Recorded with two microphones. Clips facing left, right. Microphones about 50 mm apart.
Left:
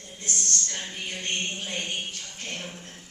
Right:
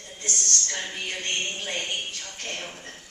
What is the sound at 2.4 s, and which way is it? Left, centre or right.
Speech, right.